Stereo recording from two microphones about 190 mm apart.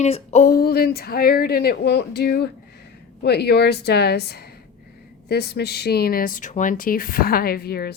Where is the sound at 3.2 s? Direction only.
60° left (ahead or behind).